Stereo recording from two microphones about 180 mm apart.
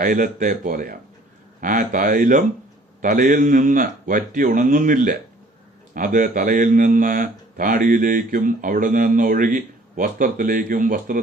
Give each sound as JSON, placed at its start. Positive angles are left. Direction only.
{"t": 0.0, "sound": "speech", "side_deg": -50}